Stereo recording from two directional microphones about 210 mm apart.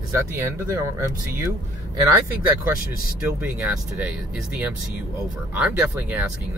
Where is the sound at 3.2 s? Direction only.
5° right (ahead or behind).